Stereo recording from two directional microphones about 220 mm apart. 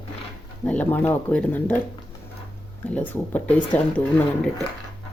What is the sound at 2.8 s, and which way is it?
Speech, 5° left (ahead or behind).